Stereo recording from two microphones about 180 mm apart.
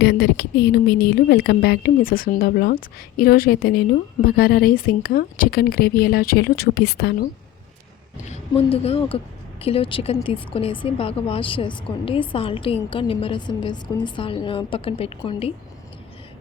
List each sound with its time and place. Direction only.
0.0 s a woman's voice: 65° left (ahead or behind)
8.3 s a woman's voice: 35° left (ahead or behind)